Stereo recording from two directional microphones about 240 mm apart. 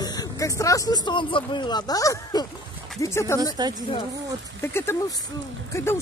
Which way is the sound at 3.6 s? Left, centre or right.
Centre.